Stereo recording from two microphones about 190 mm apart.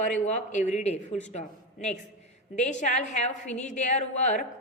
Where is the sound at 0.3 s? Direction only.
40° left (ahead or behind).